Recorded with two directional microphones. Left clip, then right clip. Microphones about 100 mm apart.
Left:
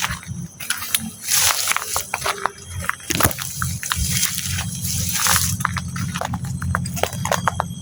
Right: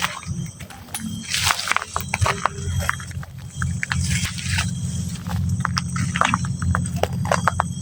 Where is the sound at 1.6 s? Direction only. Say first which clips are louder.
Even; 25° right (ahead or behind).